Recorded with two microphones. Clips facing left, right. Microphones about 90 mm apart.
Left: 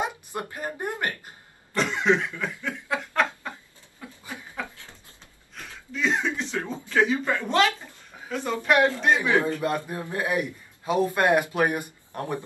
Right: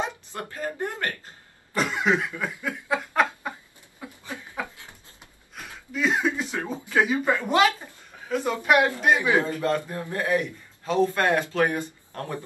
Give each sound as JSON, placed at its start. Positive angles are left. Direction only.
{"t": 0.0, "sound": "a woman's voice", "side_deg": 20}
{"t": 1.7, "sound": "snicker", "side_deg": -10}
{"t": 4.0, "sound": "a sound", "side_deg": -10}
{"t": 5.5, "sound": "a sound", "side_deg": -10}
{"t": 6.9, "sound": "a woman's voice", "side_deg": -10}
{"t": 9.4, "sound": "a man's voice", "side_deg": 15}